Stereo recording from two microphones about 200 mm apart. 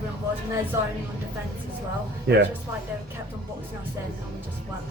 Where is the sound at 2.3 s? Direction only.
55° right (ahead or behind).